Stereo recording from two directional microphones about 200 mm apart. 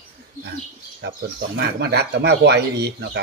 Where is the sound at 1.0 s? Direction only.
60° right (ahead or behind).